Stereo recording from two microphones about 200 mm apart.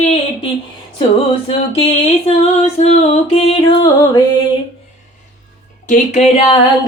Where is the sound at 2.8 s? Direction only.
30° left (ahead or behind).